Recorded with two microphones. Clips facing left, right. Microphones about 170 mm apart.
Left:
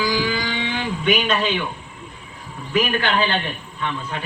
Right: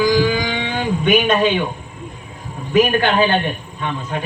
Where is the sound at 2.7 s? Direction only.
50° right (ahead or behind).